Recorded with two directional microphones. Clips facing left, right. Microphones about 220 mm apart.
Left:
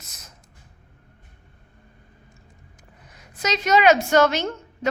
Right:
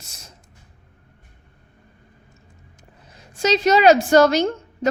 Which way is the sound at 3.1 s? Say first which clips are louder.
Right 7 dB; 30° right (ahead or behind).